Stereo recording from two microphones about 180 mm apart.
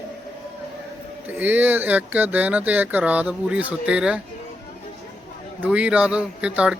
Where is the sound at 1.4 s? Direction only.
10° right (ahead or behind).